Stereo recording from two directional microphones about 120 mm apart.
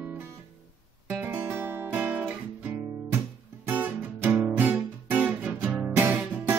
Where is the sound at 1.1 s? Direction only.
15° right (ahead or behind).